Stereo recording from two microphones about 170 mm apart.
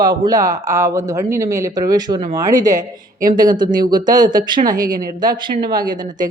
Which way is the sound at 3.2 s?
55° right (ahead or behind).